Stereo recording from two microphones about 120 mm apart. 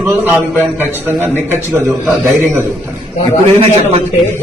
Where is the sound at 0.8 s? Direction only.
15° right (ahead or behind).